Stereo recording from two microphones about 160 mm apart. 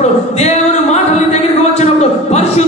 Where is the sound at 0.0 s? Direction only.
45° left (ahead or behind).